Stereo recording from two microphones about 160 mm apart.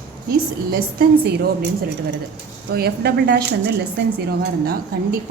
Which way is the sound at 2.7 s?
85° right.